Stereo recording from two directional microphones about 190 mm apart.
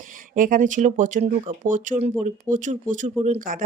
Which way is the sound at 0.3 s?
45° right (ahead or behind).